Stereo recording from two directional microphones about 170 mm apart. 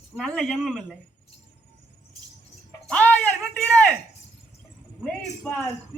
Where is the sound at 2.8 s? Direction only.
5° left (ahead or behind).